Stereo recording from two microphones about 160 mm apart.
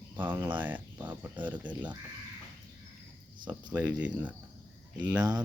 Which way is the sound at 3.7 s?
10° right (ahead or behind).